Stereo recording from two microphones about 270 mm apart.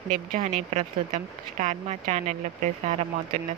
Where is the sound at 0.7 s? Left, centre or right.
Right.